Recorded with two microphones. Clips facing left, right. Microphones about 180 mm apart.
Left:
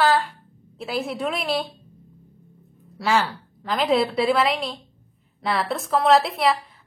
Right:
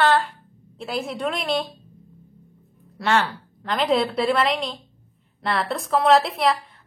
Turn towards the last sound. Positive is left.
turn(degrees=0)  # may be behind; listen again after turning